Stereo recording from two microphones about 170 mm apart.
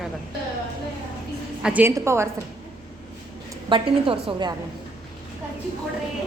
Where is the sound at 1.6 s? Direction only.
10° right (ahead or behind).